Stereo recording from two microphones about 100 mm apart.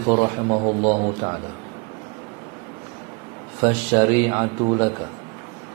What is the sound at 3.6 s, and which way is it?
A man's voice, 15° right (ahead or behind).